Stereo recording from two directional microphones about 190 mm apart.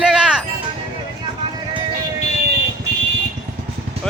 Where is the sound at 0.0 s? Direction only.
Centre (ahead or behind).